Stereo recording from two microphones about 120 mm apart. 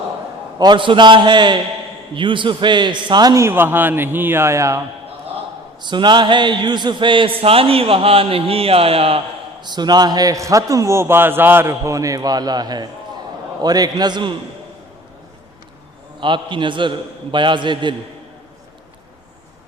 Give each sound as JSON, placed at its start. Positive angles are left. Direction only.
{"t": 0.6, "sound": "a man's voice", "side_deg": -40}
{"t": 5.8, "sound": "a man's voice", "side_deg": -40}
{"t": 9.6, "sound": "a man's voice", "side_deg": -35}
{"t": 16.2, "sound": "a man's voice", "side_deg": -45}